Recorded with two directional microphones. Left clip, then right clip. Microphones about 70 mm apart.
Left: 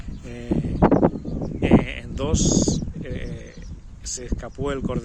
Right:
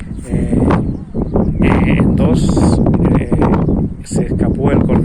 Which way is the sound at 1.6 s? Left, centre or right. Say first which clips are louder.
Right 4 dB; centre.